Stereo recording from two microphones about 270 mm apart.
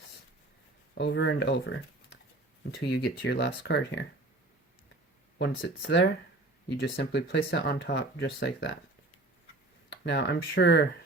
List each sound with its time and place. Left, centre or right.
0.9 s speech: left
5.4 s speech: left
9.9 s speech: left